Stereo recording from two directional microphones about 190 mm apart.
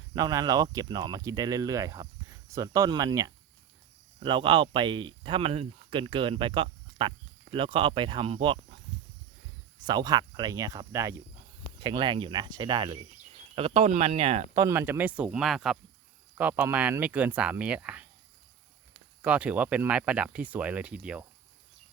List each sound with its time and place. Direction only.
0.1 s speech: 20° right (ahead or behind)
9.8 s speech: 20° right (ahead or behind)
14.5 s speech: 15° right (ahead or behind)
19.2 s speech: 5° right (ahead or behind)